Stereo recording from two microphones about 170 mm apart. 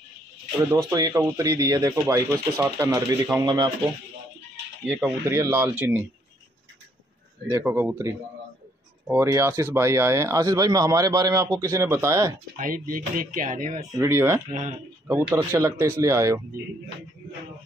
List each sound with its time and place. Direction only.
0.8 s speech: 20° right (ahead or behind)
4.8 s speech: 15° right (ahead or behind)
7.4 s speech: 15° right (ahead or behind)
12.5 s speech: 55° right (ahead or behind)
13.9 s speech: 15° right (ahead or behind)